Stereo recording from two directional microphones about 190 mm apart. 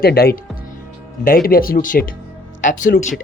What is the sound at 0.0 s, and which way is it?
Speech, 55° left (ahead or behind).